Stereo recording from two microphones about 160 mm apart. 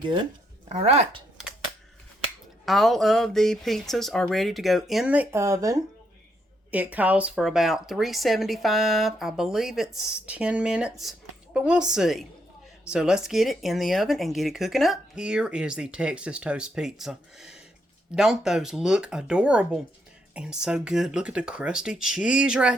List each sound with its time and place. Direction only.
0.7 s speech: 40° right (ahead or behind)
2.6 s speech: centre (ahead or behind); by 5.8 s 20° right (ahead or behind)
6.7 s speech: 10° right (ahead or behind)